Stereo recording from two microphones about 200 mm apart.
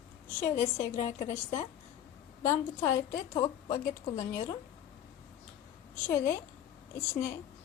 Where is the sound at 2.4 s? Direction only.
15° left (ahead or behind).